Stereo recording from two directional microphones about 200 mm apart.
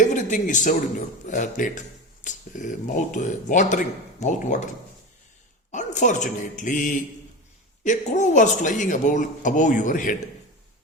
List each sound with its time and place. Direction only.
0.0 s a sound: 40° left (ahead or behind)
1.3 s speech: 40° left (ahead or behind)
5.7 s speech: 35° left (ahead or behind)